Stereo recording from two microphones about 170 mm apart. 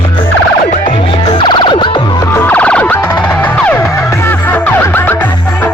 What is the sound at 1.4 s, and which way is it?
Music, 30° left (ahead or behind).